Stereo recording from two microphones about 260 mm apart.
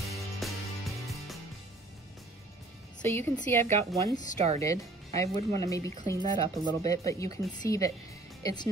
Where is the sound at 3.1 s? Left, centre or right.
Centre.